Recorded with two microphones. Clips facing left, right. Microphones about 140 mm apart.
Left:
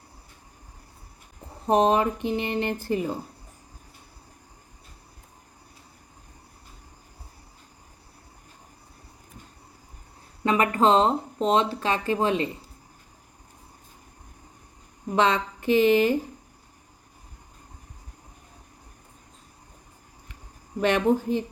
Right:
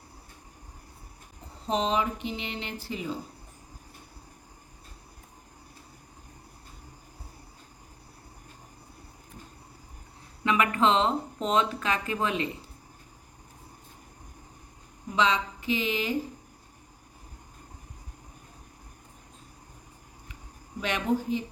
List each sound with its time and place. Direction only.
1.6 s music: 55° left (ahead or behind)
2.8 s a woman's voice: 50° left (ahead or behind)
10.4 s speech: 40° left (ahead or behind)
15.1 s a woman's voice: 55° left (ahead or behind)
20.8 s a woman's voice: 55° left (ahead or behind)